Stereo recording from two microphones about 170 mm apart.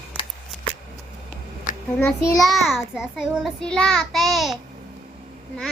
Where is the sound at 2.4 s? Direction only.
Centre (ahead or behind).